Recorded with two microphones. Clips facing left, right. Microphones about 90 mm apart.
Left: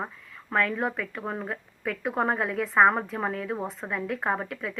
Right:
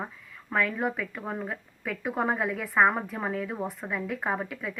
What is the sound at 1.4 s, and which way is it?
A woman's voice, centre (ahead or behind).